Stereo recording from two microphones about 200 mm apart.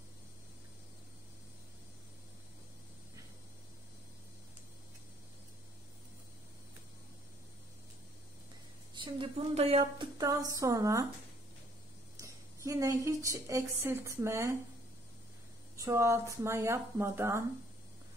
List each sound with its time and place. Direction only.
8.9 s a woman's voice: 25° right (ahead or behind)
12.2 s a woman's voice: 15° right (ahead or behind)
15.7 s speech: 15° right (ahead or behind)